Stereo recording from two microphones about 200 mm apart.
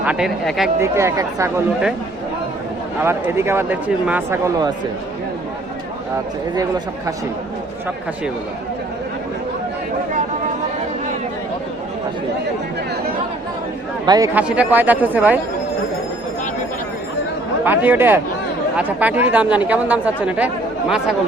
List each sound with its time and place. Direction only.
0.0 s speech: 5° right (ahead or behind)
0.8 s speech: 15° right (ahead or behind)
3.0 s speech: 15° right (ahead or behind)
14.0 s speech: 20° right (ahead or behind)
14.3 s speech: 5° right (ahead or behind)
17.6 s speech: 10° right (ahead or behind)